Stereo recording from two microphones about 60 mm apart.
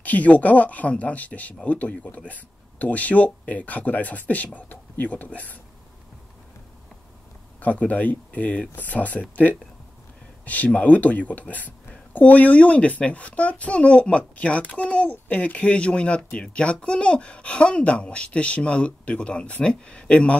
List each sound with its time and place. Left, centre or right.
0.0 s speech: left
7.6 s speech: left